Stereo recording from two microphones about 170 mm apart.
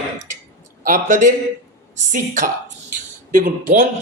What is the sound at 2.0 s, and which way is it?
Speech, 45° right (ahead or behind).